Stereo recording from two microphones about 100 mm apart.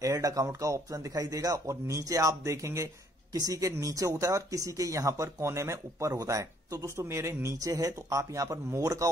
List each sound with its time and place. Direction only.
0.0 s speech: 35° right (ahead or behind)